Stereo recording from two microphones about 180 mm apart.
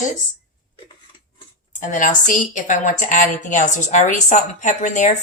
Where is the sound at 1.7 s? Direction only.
45° left (ahead or behind).